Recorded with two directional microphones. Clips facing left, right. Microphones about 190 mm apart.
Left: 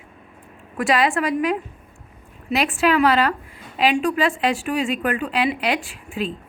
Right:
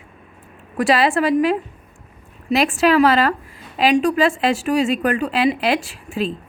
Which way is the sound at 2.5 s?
40° right (ahead or behind).